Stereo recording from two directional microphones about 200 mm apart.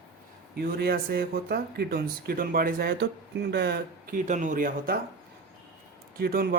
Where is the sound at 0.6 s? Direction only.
50° right (ahead or behind).